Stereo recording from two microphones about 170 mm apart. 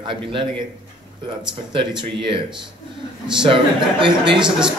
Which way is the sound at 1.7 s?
30° right (ahead or behind).